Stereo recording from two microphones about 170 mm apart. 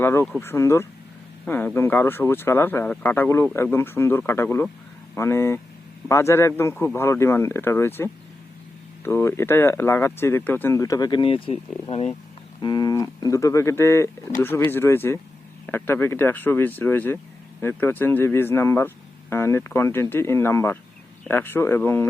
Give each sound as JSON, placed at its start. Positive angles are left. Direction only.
{"t": 0.0, "sound": "speech", "side_deg": 15}
{"t": 12.6, "sound": "speech", "side_deg": 25}